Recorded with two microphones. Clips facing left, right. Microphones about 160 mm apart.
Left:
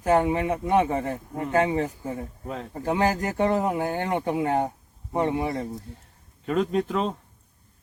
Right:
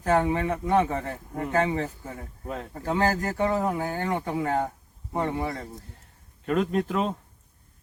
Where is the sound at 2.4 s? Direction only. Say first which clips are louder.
Right 2 dB; centre (ahead or behind).